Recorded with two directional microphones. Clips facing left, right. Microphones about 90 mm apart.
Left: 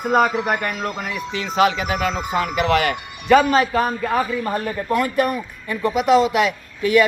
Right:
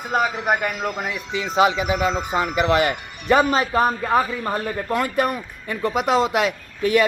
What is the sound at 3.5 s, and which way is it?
A man's voice, 30° right (ahead or behind).